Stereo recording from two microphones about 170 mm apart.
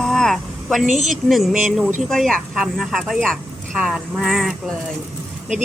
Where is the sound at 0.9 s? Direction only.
45° right (ahead or behind).